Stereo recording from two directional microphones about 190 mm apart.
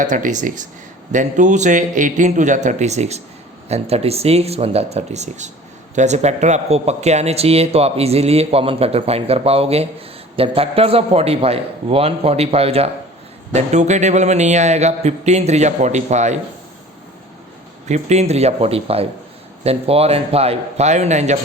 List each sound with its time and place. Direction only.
0.0 s a man's voice: 40° right (ahead or behind)
17.8 s a man's voice: 35° right (ahead or behind)